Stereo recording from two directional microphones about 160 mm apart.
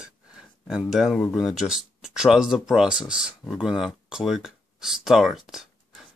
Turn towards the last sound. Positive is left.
turn(degrees=0)  # may be behind; listen again after turning